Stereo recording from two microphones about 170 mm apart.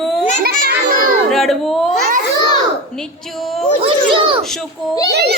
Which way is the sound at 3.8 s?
30° right (ahead or behind).